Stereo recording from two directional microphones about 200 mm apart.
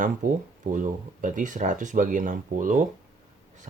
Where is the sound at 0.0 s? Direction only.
40° right (ahead or behind).